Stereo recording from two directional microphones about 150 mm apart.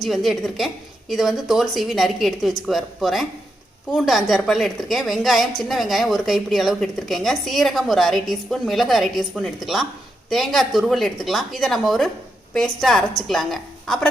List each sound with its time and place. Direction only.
0.0 s a woman's voice: centre (ahead or behind)